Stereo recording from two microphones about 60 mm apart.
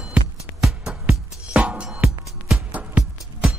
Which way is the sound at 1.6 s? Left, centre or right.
Right.